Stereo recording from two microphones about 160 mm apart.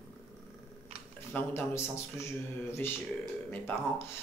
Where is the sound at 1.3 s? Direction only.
15° left (ahead or behind).